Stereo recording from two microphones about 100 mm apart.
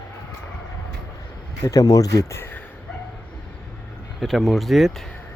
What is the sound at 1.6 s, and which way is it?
Speech, 35° left (ahead or behind).